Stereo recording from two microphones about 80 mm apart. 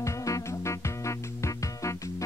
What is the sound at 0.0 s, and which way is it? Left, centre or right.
Music, left.